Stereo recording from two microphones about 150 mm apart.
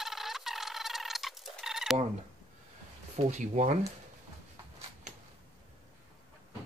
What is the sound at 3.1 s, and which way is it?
Speech, 50° right (ahead or behind).